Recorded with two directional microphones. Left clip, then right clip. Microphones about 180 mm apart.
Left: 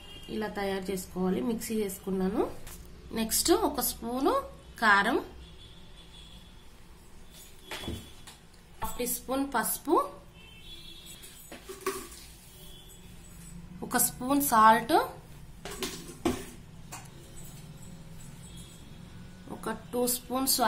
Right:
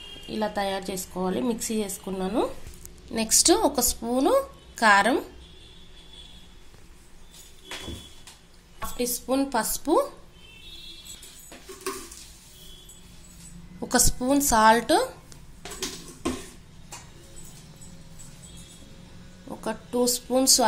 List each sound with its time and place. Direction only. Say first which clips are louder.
0.3 s a woman's voice: right 6 dB; 20° right (ahead or behind)
8.9 s a woman's voice: right 7 dB; 35° right (ahead or behind)
13.7 s a woman's voice: right 7 dB; 20° right (ahead or behind)
19.6 s speech: right 5 dB; 25° right (ahead or behind)